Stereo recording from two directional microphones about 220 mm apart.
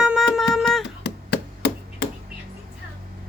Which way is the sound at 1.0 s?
45° left (ahead or behind).